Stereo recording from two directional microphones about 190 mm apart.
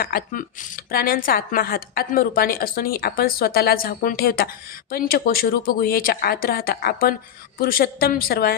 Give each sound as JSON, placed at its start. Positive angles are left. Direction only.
{"t": 0.0, "sound": "a woman's voice", "side_deg": 50}